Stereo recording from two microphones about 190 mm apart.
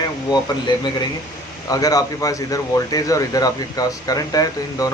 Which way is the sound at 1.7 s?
20° left (ahead or behind).